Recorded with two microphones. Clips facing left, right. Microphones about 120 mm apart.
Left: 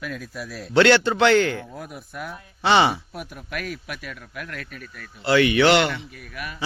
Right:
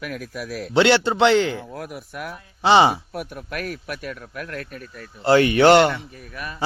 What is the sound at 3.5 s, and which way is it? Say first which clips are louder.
Speech: right 2 dB; 45° right (ahead or behind).